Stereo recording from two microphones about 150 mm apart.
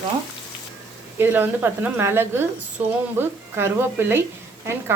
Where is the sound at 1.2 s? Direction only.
15° right (ahead or behind).